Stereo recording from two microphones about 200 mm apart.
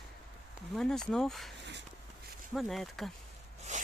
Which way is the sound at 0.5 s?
Centre (ahead or behind).